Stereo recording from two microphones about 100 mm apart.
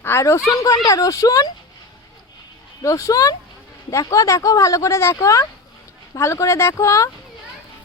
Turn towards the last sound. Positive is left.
turn(degrees=30)  # may be behind; listen again after turning